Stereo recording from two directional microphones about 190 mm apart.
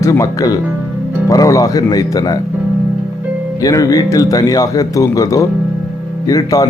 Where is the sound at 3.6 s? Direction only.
20° left (ahead or behind).